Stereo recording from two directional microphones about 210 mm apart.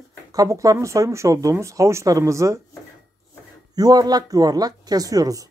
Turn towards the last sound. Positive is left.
turn(degrees=-15)  # may be behind; listen again after turning